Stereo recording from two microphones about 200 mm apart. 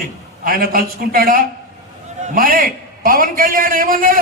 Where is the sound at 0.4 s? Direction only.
45° right (ahead or behind).